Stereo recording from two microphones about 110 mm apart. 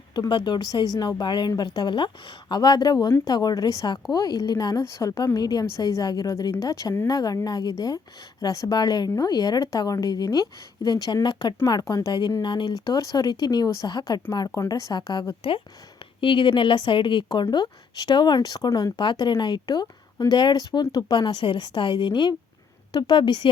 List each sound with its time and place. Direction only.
0.1 s a woman's voice: 40° left (ahead or behind)
16.2 s a woman's voice: 50° left (ahead or behind)